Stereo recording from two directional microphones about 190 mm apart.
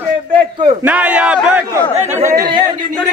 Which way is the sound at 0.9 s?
5° right (ahead or behind).